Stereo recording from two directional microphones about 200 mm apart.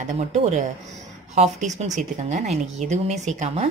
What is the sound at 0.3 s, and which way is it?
Speech, 35° right (ahead or behind).